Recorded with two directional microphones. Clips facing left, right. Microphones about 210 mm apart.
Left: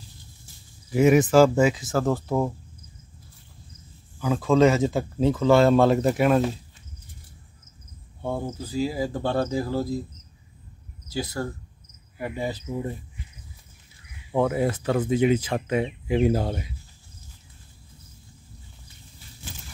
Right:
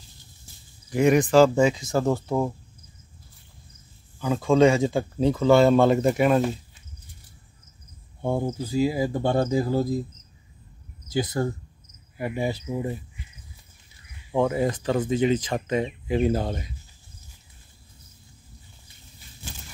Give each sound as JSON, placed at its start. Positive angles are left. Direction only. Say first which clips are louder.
{"t": 0.8, "sound": "speech", "louder": "left 2 dB", "side_deg": 5}
{"t": 4.2, "sound": "speech", "louder": "even", "side_deg": 0}
{"t": 8.2, "sound": "speech", "louder": "right 4 dB", "side_deg": -15}
{"t": 11.1, "sound": "speech", "louder": "right 4 dB", "side_deg": -20}
{"t": 14.3, "sound": "speech", "louder": "even", "side_deg": 5}